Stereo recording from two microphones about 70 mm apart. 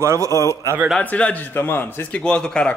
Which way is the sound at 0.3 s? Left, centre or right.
Left.